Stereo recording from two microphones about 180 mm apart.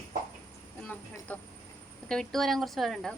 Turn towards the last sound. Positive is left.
turn(degrees=0)  # may be behind; listen again after turning